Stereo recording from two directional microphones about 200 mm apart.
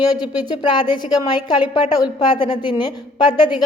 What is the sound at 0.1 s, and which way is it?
A woman's voice, 20° left (ahead or behind).